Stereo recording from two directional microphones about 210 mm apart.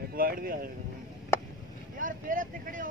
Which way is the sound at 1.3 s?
10° left (ahead or behind).